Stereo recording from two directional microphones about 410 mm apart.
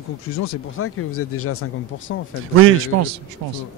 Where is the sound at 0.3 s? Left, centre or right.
Left.